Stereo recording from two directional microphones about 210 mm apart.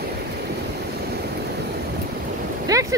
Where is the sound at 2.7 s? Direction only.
15° right (ahead or behind).